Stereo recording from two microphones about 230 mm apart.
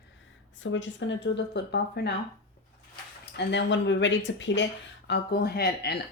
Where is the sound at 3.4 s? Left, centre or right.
Left.